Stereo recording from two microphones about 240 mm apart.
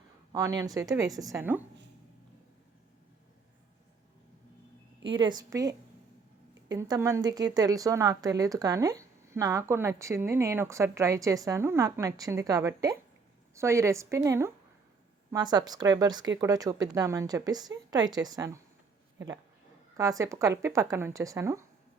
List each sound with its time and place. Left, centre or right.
0.3 s speech: centre
5.0 s speech: centre
20.0 s speech: centre